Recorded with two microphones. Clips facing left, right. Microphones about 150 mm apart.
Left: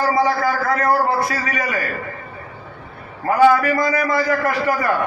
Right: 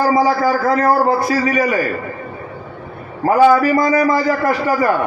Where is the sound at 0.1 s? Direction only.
25° right (ahead or behind).